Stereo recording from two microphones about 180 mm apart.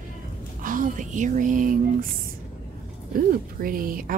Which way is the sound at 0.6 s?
50° right (ahead or behind).